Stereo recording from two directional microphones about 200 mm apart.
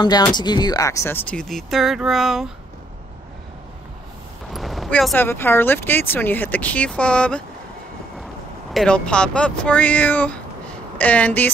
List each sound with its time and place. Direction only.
0.0 s speech: 20° left (ahead or behind); by 2.5 s centre (ahead or behind)
4.5 s speech: centre (ahead or behind)
8.7 s speech: 5° left (ahead or behind)